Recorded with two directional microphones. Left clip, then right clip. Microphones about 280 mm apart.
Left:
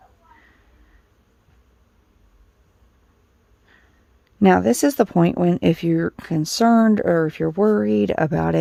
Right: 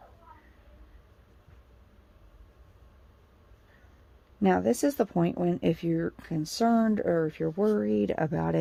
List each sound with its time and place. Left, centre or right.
4.4 s speech: left